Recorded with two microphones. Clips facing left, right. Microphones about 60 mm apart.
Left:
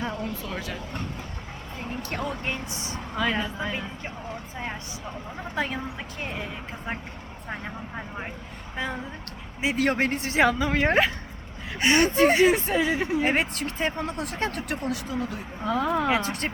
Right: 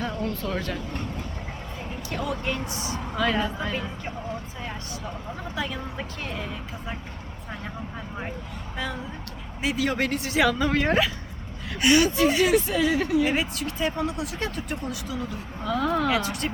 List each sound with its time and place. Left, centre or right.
0.0 s speech: centre
2.0 s speech: left
2.2 s speech: left
3.2 s speech: centre
5.5 s speech: left
6.2 s speech: centre
8.7 s speech: left
9.7 s speech: left
10.6 s speech: centre
10.8 s speech: left
13.3 s speech: left
15.0 s speech: left
15.6 s speech: centre; by 16.5 s left